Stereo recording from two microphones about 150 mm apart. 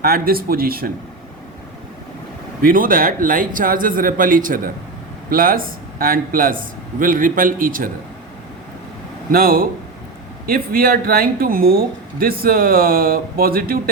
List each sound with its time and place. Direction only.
0.0 s speech: 85° right
2.6 s speech: 70° right (ahead or behind)
9.3 s speech: 75° right (ahead or behind)